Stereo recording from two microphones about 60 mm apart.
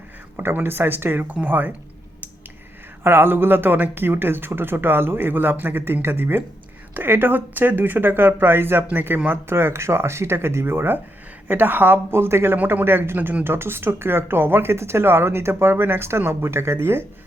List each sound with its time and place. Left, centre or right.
0.3 s speech: right
3.0 s speech: right
12.1 s speech: right